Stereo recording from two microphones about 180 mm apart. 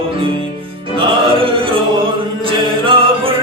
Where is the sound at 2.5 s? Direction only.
30° right (ahead or behind).